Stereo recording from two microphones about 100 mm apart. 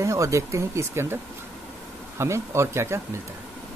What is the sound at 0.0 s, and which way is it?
Speech, 30° right (ahead or behind).